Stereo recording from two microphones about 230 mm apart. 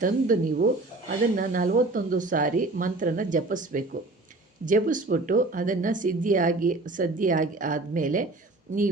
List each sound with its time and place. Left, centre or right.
0.0 s speech: right